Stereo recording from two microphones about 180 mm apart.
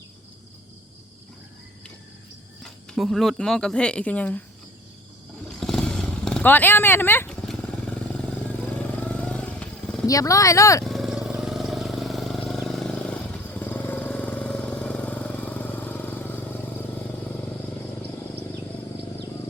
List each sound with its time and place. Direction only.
2.6 s speech: centre (ahead or behind)
5.5 s motorcycle: centre (ahead or behind)
10.1 s speech: 20° left (ahead or behind)
10.8 s vehicle: centre (ahead or behind)